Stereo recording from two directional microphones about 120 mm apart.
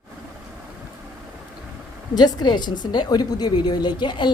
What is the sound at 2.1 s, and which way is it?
A woman's voice, 35° left (ahead or behind).